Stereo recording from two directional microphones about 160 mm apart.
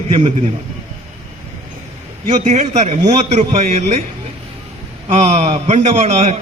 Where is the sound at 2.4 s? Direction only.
45° right (ahead or behind).